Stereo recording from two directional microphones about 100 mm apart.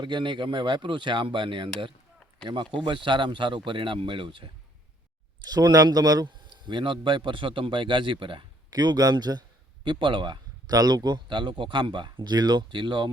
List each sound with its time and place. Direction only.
0.0 s speech: 50° right (ahead or behind)
2.8 s speech: 55° right (ahead or behind)
5.4 s speech: 45° right (ahead or behind)
8.7 s speech: 40° right (ahead or behind)
9.8 s speech: 55° right (ahead or behind)